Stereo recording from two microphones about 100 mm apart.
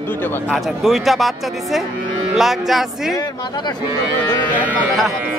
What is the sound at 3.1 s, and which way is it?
Speech, 45° left (ahead or behind).